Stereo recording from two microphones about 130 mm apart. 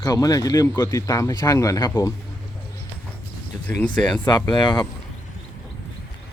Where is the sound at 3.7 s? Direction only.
10° left (ahead or behind).